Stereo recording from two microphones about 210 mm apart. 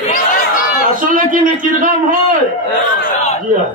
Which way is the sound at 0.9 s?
40° right (ahead or behind).